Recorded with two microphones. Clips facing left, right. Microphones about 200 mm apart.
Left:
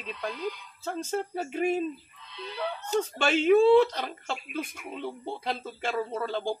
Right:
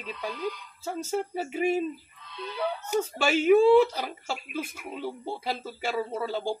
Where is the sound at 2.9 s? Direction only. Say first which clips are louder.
Even; 10° right (ahead or behind).